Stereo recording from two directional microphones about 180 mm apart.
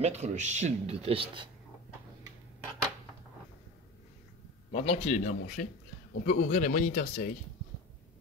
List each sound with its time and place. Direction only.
0.0 s speech: 40° right (ahead or behind)
4.7 s speech: 35° left (ahead or behind)